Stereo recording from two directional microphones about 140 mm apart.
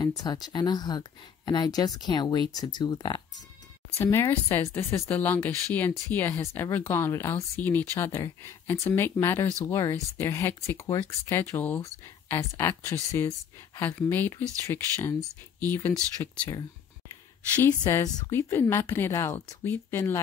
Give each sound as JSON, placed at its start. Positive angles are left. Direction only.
{"t": 0.2, "sound": "speech", "side_deg": 30}
{"t": 4.0, "sound": "speech", "side_deg": 15}
{"t": 17.8, "sound": "speech", "side_deg": 25}